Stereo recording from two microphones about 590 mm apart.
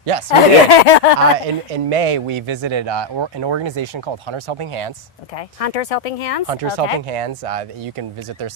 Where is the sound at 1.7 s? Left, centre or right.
Right.